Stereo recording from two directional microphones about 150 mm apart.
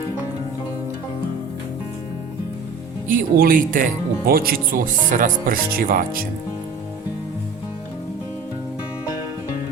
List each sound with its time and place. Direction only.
3.1 s speech: 70° right (ahead or behind)